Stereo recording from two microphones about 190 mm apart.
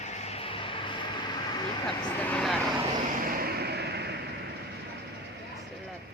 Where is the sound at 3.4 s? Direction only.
60° right (ahead or behind).